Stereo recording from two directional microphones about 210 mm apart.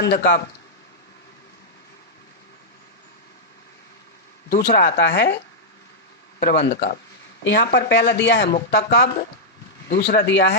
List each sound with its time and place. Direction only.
0.0 s speech: 55° left (ahead or behind)
4.5 s speech: 50° left (ahead or behind)
6.4 s speech: 55° left (ahead or behind)